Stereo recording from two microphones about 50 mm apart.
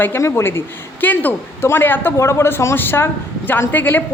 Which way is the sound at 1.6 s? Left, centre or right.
Left.